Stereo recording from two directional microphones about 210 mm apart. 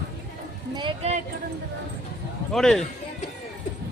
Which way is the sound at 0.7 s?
25° right (ahead or behind).